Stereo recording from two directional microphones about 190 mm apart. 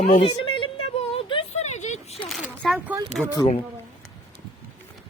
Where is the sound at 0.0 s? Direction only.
30° left (ahead or behind).